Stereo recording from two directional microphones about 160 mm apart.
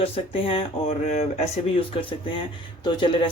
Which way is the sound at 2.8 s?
30° left (ahead or behind).